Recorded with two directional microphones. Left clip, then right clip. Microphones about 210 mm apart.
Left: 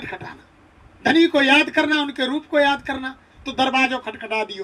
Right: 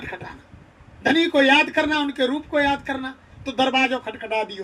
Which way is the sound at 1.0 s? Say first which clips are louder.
Left 1 dB; 55° left (ahead or behind).